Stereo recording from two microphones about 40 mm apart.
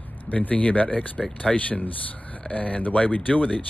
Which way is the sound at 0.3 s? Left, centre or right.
Left.